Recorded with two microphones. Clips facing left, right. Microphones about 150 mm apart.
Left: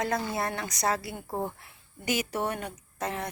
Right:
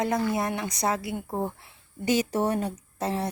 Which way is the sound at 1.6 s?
30° right (ahead or behind).